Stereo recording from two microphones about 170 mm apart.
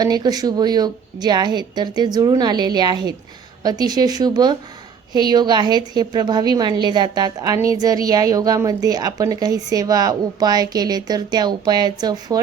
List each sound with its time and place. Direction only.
0.0 s a woman's voice: 25° right (ahead or behind)